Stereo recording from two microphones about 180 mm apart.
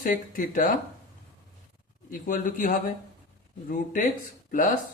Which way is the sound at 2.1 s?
50° left (ahead or behind).